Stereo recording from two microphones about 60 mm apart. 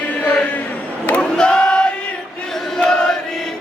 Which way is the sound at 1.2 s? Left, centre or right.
Centre.